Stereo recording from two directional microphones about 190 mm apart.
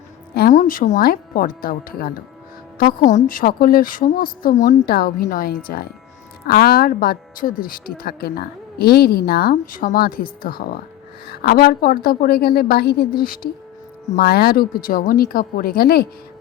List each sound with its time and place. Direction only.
0.3 s speech: 45° left (ahead or behind)